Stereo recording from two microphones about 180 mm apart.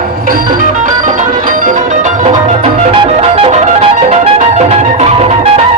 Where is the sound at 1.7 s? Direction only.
45° right (ahead or behind).